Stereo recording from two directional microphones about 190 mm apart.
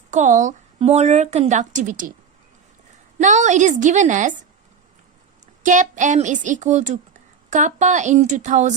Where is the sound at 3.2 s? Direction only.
40° right (ahead or behind).